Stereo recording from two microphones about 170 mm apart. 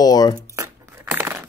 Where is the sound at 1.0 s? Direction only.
10° right (ahead or behind).